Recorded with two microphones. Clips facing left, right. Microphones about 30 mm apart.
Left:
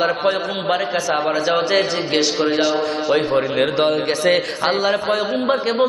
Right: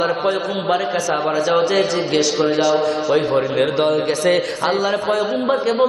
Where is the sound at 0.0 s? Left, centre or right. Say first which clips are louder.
Even; centre.